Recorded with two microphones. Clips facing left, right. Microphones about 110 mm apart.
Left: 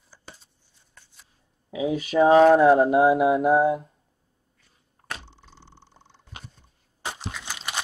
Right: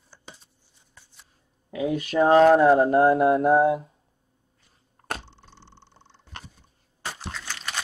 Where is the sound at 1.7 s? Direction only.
Centre (ahead or behind).